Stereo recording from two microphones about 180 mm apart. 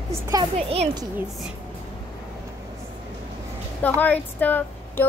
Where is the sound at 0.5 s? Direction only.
35° right (ahead or behind).